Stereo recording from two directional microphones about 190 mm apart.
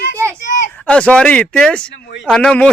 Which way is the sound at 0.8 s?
5° left (ahead or behind).